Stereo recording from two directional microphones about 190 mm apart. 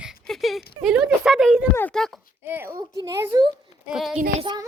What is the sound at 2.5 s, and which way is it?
Speech, 10° right (ahead or behind).